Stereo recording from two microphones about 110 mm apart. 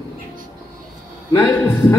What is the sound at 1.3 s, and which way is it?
Speech, 20° left (ahead or behind).